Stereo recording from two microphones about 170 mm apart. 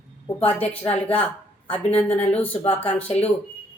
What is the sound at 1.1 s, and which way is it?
A woman's voice, 10° left (ahead or behind).